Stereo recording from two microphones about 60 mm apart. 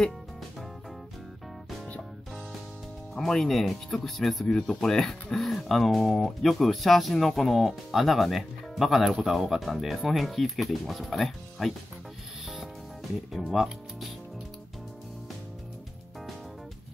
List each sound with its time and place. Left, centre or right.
3.2 s speech: centre
13.5 s speech: centre